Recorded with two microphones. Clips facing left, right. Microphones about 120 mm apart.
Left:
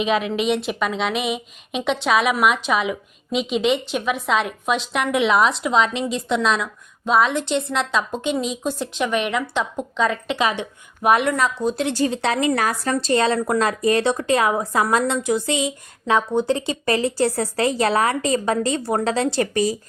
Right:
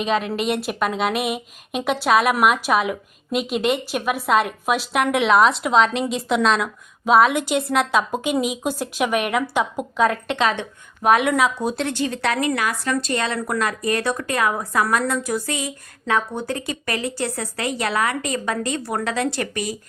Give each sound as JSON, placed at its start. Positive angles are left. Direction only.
{"t": 0.0, "sound": "speech", "side_deg": 0}
{"t": 11.1, "sound": "speech", "side_deg": -5}
{"t": 11.9, "sound": "speech", "side_deg": 30}
{"t": 12.5, "sound": "speech", "side_deg": 35}